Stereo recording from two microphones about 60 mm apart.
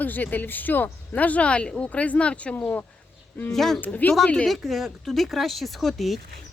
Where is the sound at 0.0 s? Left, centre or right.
Left.